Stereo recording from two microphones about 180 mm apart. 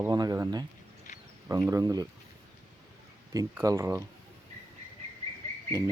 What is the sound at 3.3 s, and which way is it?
Speech, 20° right (ahead or behind).